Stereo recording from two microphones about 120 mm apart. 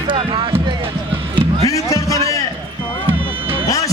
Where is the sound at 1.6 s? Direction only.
30° left (ahead or behind).